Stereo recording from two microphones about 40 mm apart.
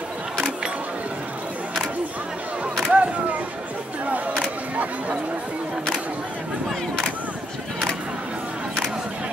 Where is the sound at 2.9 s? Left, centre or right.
Right.